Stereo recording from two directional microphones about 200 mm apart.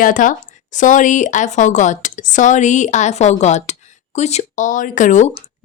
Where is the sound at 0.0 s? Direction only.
40° left (ahead or behind).